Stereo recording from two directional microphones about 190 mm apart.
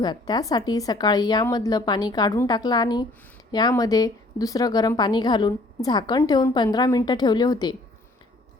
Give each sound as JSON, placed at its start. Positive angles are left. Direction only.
{"t": 0.0, "sound": "a woman's voice", "side_deg": 20}